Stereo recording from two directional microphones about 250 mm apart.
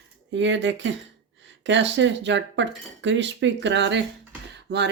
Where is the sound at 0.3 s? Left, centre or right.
Right.